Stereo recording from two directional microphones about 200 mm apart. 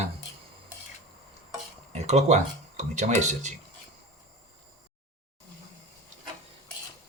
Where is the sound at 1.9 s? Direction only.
35° right (ahead or behind).